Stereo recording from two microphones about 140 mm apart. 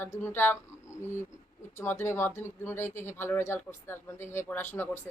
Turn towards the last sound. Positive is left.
turn(degrees=15)  # may be behind; listen again after turning